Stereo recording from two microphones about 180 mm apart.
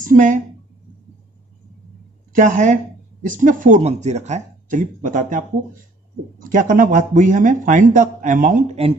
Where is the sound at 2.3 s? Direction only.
45° right (ahead or behind).